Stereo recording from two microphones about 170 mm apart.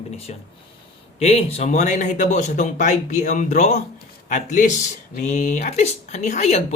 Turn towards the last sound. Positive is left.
turn(degrees=40)  # may be behind; listen again after turning